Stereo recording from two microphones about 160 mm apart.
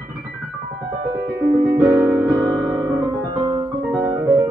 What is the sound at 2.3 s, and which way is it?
Music, 25° right (ahead or behind).